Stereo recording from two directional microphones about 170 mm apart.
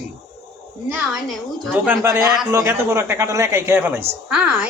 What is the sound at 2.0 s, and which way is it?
A woman's voice, 20° right (ahead or behind).